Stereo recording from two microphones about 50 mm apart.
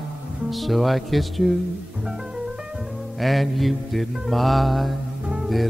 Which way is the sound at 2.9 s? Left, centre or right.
Centre.